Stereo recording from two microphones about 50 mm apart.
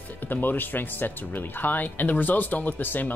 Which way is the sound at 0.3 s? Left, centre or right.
Left.